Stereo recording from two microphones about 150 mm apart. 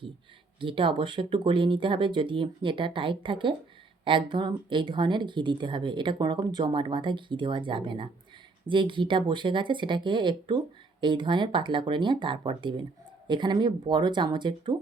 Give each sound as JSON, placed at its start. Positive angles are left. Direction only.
{"t": 0.6, "sound": "speech", "side_deg": -35}